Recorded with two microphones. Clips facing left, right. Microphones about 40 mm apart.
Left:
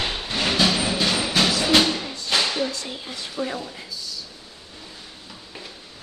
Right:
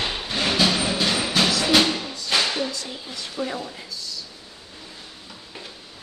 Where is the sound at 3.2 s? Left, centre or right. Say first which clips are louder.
Even; centre.